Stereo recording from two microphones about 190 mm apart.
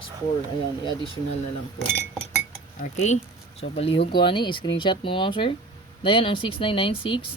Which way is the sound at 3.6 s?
30° left (ahead or behind).